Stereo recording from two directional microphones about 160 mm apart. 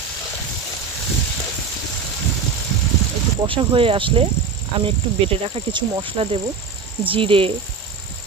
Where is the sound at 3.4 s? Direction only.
35° right (ahead or behind).